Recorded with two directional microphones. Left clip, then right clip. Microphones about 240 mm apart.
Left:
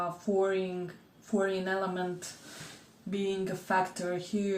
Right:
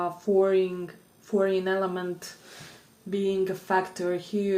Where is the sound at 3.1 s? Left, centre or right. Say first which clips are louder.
Right 6 dB; right.